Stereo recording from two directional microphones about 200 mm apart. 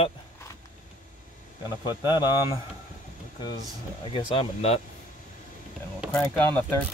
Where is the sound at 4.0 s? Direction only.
25° left (ahead or behind).